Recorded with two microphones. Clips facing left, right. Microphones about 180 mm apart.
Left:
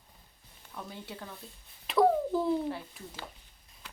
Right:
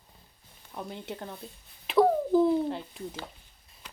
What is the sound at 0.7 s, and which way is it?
Speech, 25° right (ahead or behind).